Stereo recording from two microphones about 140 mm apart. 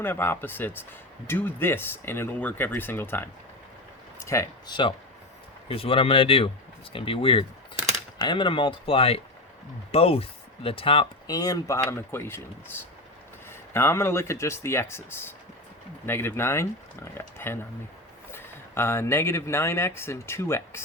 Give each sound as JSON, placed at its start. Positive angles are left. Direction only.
{"t": 0.0, "sound": "speech", "side_deg": 15}
{"t": 4.3, "sound": "speech", "side_deg": 20}
{"t": 4.7, "sound": "speech", "side_deg": 35}
{"t": 11.3, "sound": "speech", "side_deg": 25}